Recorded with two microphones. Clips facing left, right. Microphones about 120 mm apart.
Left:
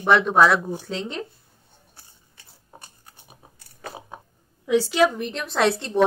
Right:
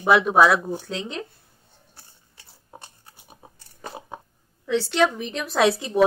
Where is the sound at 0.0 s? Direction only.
5° right (ahead or behind).